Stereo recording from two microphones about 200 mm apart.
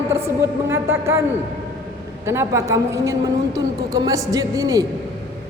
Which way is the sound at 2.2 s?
15° right (ahead or behind).